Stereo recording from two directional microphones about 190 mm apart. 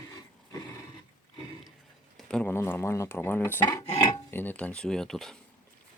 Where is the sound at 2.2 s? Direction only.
5° left (ahead or behind).